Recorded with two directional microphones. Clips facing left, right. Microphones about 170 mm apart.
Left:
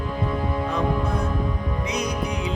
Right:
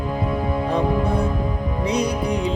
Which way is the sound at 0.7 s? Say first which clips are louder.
Right 5 dB; 30° right (ahead or behind).